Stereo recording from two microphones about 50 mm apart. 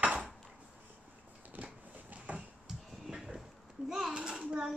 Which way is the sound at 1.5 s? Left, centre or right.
Right.